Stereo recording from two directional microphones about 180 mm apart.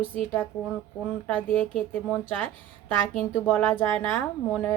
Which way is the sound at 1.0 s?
10° left (ahead or behind).